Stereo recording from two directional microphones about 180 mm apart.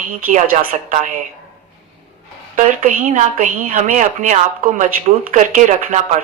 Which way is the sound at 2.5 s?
45° right (ahead or behind).